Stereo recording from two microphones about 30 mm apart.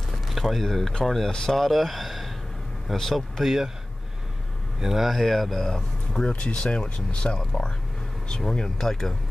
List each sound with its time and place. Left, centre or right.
0.3 s speech: centre
1.3 s speech: left
1.6 s speech: centre
3.4 s speech: centre
4.8 s speech: centre
5.1 s speech: centre
5.6 s speech: centre
6.2 s speech: left
8.4 s speech: centre